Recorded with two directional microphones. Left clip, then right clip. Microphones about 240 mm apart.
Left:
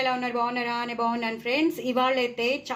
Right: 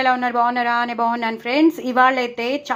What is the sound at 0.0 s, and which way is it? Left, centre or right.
A woman's voice, centre.